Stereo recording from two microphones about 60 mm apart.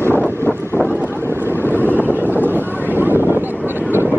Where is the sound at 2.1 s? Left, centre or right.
Right.